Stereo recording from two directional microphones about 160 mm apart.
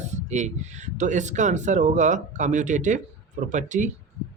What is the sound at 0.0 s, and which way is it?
Speech, 45° right (ahead or behind).